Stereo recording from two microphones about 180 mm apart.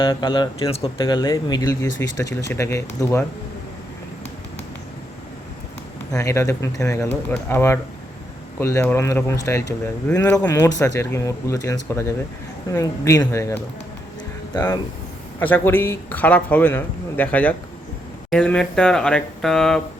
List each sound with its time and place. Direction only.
0.0 s speech: 25° left (ahead or behind)
6.1 s speech: 15° left (ahead or behind)